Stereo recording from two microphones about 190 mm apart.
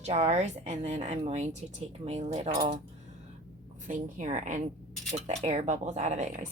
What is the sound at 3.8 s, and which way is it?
Speech, 40° right (ahead or behind).